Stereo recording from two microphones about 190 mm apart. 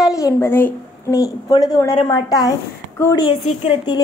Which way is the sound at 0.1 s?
15° left (ahead or behind).